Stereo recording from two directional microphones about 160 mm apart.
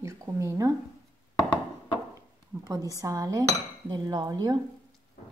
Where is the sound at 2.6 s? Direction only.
20° right (ahead or behind).